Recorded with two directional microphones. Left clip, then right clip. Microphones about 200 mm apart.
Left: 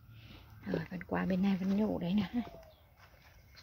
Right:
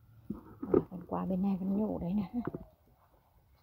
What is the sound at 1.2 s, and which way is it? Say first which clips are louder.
Speech: left 1 dB; 15° right (ahead or behind).